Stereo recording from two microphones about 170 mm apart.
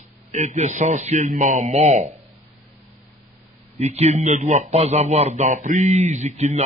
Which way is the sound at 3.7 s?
40° right (ahead or behind).